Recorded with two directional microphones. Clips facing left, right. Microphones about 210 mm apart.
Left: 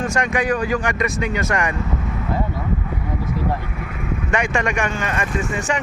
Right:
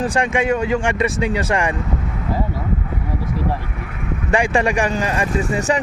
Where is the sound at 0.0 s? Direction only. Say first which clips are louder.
Right 2 dB; 30° right (ahead or behind).